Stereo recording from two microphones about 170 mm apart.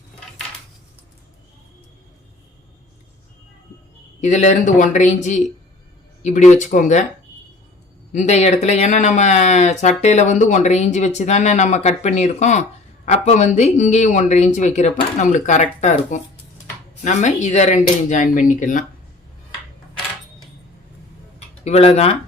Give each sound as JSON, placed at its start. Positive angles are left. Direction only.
{"t": 4.2, "sound": "speech", "side_deg": 45}
{"t": 8.1, "sound": "speech", "side_deg": 40}
{"t": 21.3, "sound": "speech", "side_deg": 40}